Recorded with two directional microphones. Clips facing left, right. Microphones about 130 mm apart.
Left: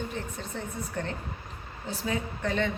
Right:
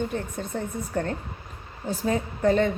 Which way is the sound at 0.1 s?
50° right (ahead or behind).